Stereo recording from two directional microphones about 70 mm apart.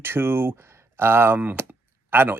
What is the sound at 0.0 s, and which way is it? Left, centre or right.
Speech, right.